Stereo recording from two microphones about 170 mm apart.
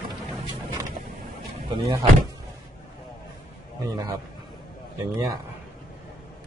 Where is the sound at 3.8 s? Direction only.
20° right (ahead or behind).